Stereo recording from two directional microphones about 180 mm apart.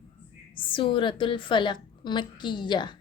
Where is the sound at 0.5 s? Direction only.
30° left (ahead or behind).